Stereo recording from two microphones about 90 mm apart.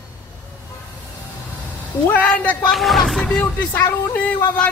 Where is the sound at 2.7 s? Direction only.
Centre (ahead or behind).